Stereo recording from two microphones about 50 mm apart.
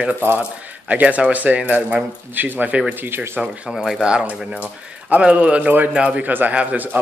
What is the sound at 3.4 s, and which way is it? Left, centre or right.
Speech, centre.